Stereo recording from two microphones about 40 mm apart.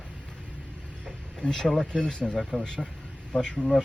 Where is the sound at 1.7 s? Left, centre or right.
Centre.